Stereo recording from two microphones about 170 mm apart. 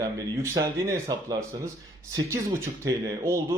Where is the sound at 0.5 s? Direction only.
20° right (ahead or behind).